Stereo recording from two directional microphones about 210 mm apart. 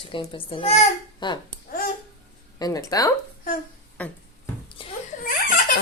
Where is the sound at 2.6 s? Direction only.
15° left (ahead or behind).